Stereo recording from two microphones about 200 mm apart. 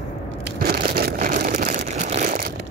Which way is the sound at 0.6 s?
45° right (ahead or behind).